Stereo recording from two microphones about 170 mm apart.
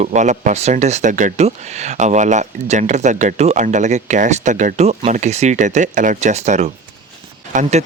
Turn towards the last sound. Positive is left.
turn(degrees=-45)  # may be behind; listen again after turning